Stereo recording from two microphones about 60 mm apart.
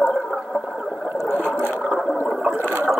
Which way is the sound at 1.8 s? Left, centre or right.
Centre.